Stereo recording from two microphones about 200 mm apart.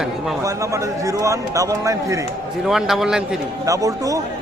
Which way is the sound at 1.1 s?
15° right (ahead or behind).